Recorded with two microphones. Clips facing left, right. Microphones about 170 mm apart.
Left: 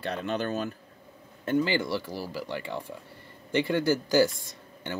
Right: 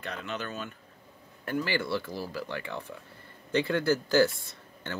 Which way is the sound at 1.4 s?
20° left (ahead or behind).